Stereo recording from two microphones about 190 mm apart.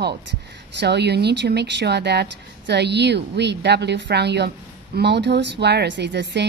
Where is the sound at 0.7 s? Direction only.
60° right (ahead or behind).